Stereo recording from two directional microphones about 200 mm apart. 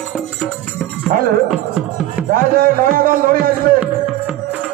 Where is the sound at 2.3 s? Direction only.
45° right (ahead or behind).